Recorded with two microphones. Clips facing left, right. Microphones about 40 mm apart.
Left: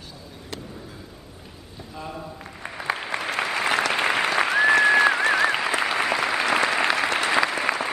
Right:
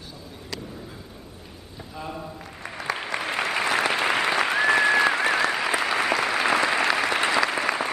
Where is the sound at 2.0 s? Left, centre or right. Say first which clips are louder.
Even; centre.